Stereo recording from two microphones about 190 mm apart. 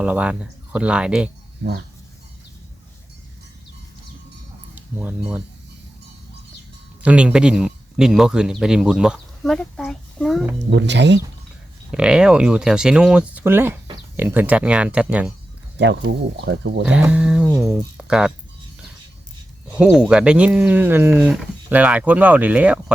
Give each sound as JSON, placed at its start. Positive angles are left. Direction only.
{"t": 0.0, "sound": "speech", "side_deg": -5}
{"t": 1.6, "sound": "speech", "side_deg": -70}
{"t": 4.7, "sound": "speech", "side_deg": -10}
{"t": 7.0, "sound": "speech", "side_deg": -5}
{"t": 10.7, "sound": "speech", "side_deg": -70}
{"t": 11.9, "sound": "speech", "side_deg": -5}
{"t": 15.8, "sound": "speech", "side_deg": -65}
{"t": 16.8, "sound": "speech", "side_deg": -5}
{"t": 19.7, "sound": "speech", "side_deg": -5}